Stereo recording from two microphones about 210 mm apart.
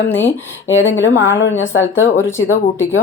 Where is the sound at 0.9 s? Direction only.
70° left (ahead or behind).